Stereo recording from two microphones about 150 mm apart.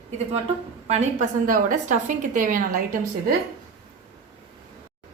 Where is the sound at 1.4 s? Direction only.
60° right (ahead or behind).